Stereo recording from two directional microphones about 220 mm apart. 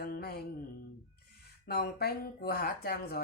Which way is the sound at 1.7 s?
45° left (ahead or behind).